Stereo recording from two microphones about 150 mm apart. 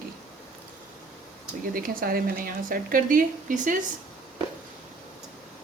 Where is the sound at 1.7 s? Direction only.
75° right (ahead or behind); by 3.8 s 60° right (ahead or behind).